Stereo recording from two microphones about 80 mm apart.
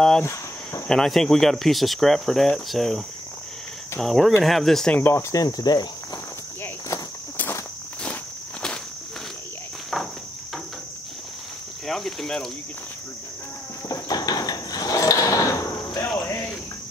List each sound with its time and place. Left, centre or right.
0.2 s cricket: left
0.8 s speech: centre
4.0 s speech: centre
4.9 s speech: left
5.3 s cricket: left
11.8 s cricket: centre
13.8 s a sound: left
16.2 s cricket: left